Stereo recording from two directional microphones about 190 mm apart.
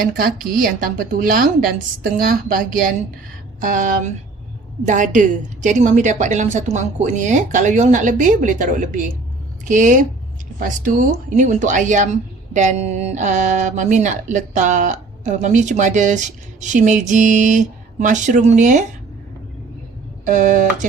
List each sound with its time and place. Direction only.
0.2 s speech: 50° right (ahead or behind)
20.2 s speech: 40° right (ahead or behind)